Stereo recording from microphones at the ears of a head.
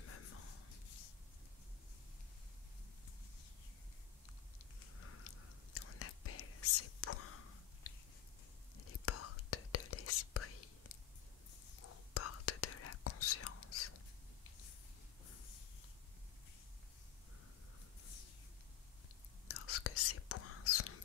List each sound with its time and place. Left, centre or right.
0.0 s whispering: left
4.7 s whispering: left
19.4 s whispering: left